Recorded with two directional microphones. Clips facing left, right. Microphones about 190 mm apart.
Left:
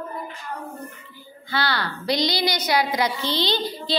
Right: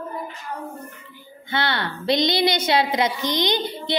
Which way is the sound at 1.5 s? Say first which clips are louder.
Right 1 dB; 25° right (ahead or behind).